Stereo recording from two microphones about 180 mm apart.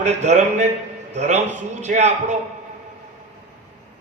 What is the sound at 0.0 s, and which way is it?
A man's voice, 40° right (ahead or behind).